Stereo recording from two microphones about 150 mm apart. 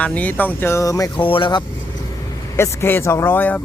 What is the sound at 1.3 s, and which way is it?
Speech, 35° left (ahead or behind).